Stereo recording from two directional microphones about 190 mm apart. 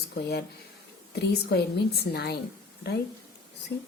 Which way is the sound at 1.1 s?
60° left (ahead or behind).